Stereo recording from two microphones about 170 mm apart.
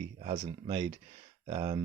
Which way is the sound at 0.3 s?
30° right (ahead or behind).